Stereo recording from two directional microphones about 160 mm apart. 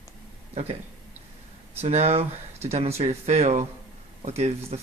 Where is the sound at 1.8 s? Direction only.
40° right (ahead or behind).